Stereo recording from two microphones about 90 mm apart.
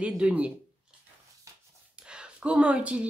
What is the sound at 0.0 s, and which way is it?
Speech, 15° right (ahead or behind).